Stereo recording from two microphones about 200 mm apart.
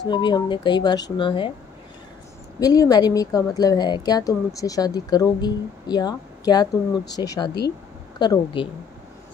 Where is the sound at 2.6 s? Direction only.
20° left (ahead or behind).